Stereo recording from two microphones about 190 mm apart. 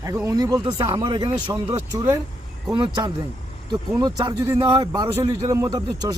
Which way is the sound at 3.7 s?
20° right (ahead or behind).